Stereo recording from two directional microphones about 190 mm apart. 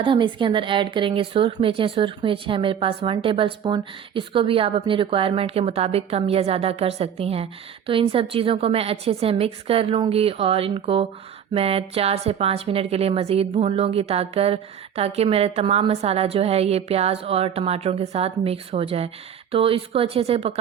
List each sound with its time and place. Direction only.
0.0 s a woman's voice: 25° right (ahead or behind)